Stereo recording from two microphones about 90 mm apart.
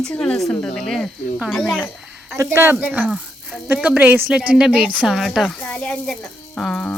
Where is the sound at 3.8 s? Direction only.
10° right (ahead or behind); by 6.9 s 5° left (ahead or behind).